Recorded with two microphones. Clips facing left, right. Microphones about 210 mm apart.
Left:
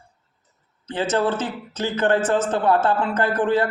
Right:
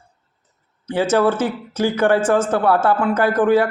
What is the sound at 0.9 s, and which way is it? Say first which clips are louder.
A man's voice: right 5 dB; 10° right (ahead or behind).